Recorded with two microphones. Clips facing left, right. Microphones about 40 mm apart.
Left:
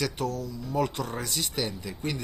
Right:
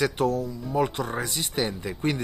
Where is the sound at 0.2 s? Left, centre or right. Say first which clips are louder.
Right 6 dB; right.